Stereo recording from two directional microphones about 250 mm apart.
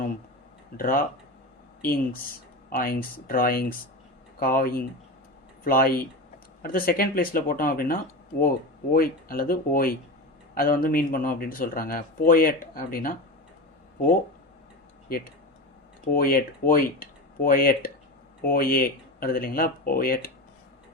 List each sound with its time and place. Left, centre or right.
0.8 s speech: left
2.7 s speech: left
16.1 s speech: left